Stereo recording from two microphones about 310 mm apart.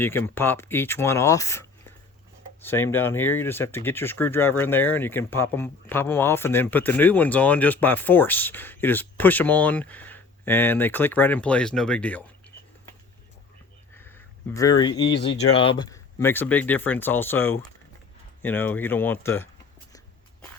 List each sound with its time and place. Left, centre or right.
0.0 s speech: centre
14.5 s speech: centre
14.9 s speech: left
15.5 s speech: centre